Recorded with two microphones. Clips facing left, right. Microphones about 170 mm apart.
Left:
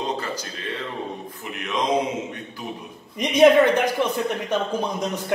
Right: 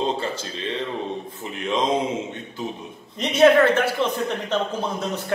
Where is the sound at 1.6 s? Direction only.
25° right (ahead or behind).